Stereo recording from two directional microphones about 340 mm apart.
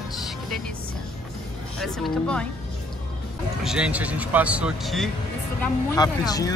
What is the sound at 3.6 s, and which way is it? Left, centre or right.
Speech, centre.